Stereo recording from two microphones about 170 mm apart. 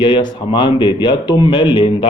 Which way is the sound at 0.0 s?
30° left (ahead or behind).